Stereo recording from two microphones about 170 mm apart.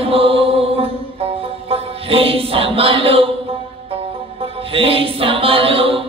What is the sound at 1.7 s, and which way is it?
Music, 35° right (ahead or behind).